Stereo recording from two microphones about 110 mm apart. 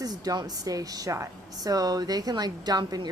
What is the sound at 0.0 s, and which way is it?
Speech, 35° right (ahead or behind).